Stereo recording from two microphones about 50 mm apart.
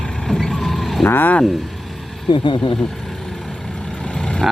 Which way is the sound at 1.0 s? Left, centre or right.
Left.